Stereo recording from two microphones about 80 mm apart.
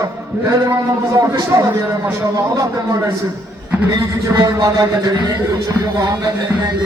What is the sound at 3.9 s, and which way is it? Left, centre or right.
A man's voice, right.